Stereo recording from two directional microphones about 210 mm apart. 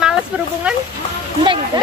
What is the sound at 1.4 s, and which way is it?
Speech, 25° right (ahead or behind).